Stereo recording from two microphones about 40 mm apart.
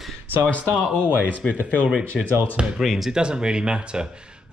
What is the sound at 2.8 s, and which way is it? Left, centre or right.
Speech, centre.